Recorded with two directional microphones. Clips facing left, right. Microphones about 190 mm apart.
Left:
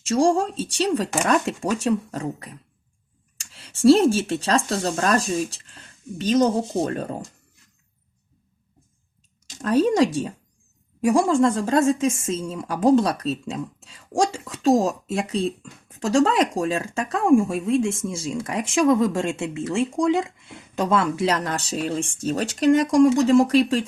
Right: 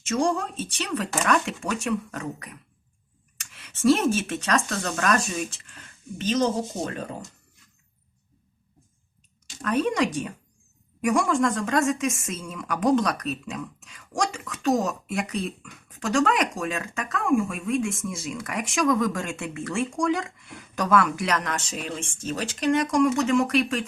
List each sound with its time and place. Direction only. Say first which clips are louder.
0.1 s speech: left 5 dB; 30° left (ahead or behind)
9.6 s a woman's voice: left 5 dB; 35° left (ahead or behind)